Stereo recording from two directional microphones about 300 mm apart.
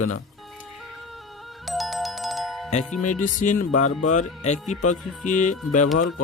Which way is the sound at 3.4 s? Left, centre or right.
Left.